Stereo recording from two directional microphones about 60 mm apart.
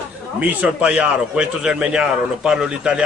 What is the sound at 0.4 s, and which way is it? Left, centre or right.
Speech, right.